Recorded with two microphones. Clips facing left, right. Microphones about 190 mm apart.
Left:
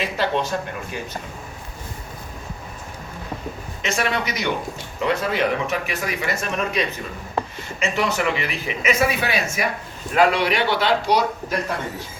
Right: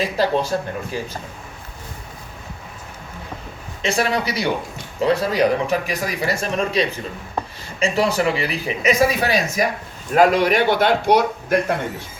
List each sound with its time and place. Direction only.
0.0 s speech: 35° right (ahead or behind)
3.8 s speech: 35° right (ahead or behind); by 11.6 s 55° right (ahead or behind)